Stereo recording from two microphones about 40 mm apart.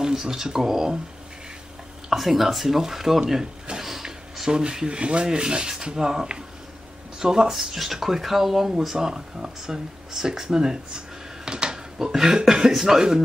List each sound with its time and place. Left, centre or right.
0.0 s speech: centre
2.0 s speech: centre
3.7 s a sound: centre
4.5 s rub: centre
7.2 s speech: centre